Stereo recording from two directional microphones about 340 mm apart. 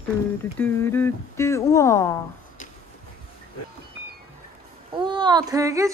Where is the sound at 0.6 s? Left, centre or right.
Centre.